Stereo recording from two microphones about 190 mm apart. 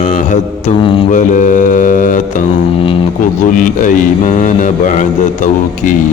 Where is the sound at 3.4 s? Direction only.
45° left (ahead or behind).